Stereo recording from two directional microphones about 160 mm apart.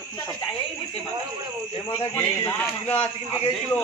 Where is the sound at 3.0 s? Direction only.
35° left (ahead or behind).